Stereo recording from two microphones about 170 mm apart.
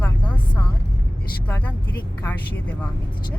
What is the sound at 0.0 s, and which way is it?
Vehicle, 10° left (ahead or behind).